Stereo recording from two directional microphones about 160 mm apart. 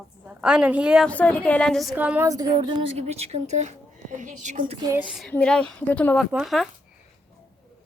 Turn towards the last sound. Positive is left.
turn(degrees=0)  # may be behind; listen again after turning